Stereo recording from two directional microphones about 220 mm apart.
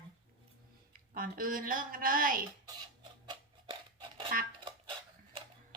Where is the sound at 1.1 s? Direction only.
40° right (ahead or behind).